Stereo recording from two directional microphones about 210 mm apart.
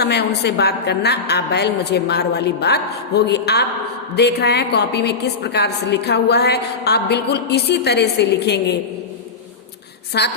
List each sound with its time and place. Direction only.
0.0 s a woman's voice: 50° left (ahead or behind)
10.2 s a woman's voice: 50° left (ahead or behind)